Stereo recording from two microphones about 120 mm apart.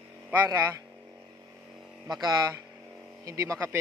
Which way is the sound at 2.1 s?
35° right (ahead or behind).